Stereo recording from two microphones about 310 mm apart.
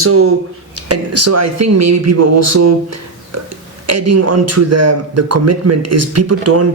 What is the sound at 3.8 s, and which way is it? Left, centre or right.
Speech, right.